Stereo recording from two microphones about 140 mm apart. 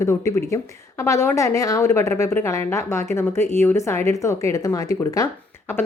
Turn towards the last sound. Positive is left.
turn(degrees=25)  # may be behind; listen again after turning